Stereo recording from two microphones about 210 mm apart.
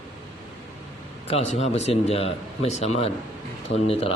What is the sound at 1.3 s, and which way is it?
Speech, 30° left (ahead or behind).